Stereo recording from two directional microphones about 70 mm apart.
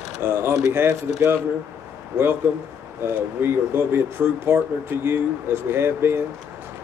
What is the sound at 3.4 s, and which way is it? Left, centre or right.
Speech, right.